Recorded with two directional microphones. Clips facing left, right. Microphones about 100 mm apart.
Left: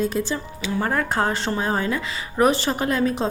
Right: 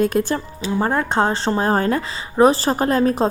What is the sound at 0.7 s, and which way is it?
A woman's voice, 25° right (ahead or behind).